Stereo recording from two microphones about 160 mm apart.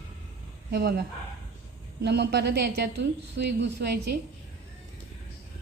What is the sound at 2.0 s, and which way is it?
Speech, 90° right.